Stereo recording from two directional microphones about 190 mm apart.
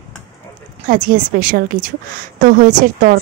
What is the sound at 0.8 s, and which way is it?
Speech, 45° right (ahead or behind).